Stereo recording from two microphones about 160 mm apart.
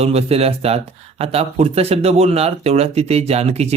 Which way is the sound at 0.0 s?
40° right (ahead or behind).